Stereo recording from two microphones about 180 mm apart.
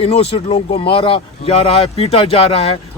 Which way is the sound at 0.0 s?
35° left (ahead or behind).